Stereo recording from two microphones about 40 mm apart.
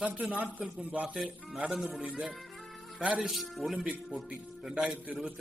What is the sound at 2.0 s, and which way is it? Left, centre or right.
Speech, centre.